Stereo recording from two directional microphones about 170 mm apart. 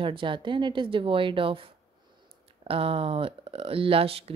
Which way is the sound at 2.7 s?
35° right (ahead or behind).